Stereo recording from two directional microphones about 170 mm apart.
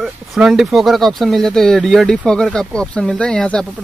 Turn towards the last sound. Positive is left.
turn(degrees=5)  # may be behind; listen again after turning